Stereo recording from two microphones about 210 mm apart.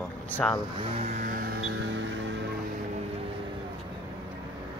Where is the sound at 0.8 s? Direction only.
30° right (ahead or behind); by 2.3 s 55° right (ahead or behind).